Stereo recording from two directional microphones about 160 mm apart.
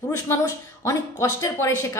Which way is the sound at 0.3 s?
20° left (ahead or behind).